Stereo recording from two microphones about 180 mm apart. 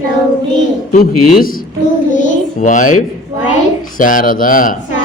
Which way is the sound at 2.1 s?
45° left (ahead or behind).